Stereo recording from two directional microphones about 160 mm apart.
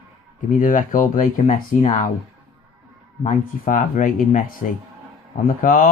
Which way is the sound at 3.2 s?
50° left (ahead or behind).